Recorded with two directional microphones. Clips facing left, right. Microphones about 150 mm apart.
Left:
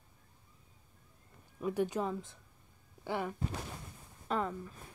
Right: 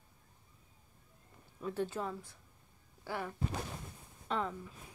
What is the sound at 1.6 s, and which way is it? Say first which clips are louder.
Speech: left 4 dB; 15° left (ahead or behind).